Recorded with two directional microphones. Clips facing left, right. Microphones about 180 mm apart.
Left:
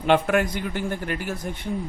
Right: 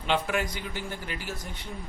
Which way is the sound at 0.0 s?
55° left (ahead or behind).